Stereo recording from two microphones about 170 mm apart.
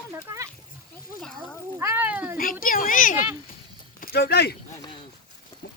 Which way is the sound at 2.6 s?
55° left (ahead or behind).